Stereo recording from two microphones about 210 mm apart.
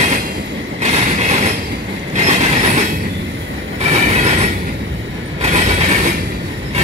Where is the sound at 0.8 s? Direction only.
30° right (ahead or behind).